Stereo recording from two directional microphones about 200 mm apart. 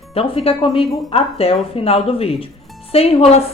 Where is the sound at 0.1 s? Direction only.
30° left (ahead or behind).